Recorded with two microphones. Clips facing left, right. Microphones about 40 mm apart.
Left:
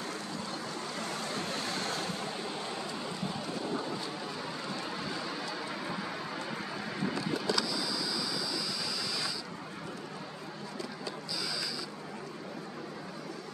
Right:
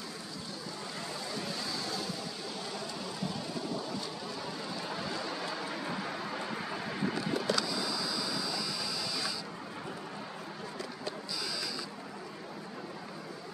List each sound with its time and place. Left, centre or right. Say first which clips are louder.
1.3 s a sound: left 2 dB; left
3.6 s thunder: left 4 dB; left
4.8 s vehicle: even; centre
7.4 s printer: even; right